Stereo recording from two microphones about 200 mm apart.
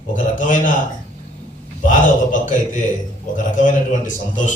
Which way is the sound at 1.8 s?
40° left (ahead or behind).